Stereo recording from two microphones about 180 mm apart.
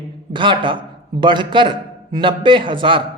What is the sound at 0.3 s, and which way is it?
A man's voice, 25° right (ahead or behind).